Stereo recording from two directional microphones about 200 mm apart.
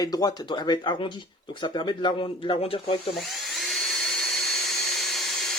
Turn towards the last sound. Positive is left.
turn(degrees=0)  # may be behind; listen again after turning